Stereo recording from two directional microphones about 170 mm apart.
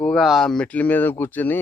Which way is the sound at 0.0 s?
Centre (ahead or behind).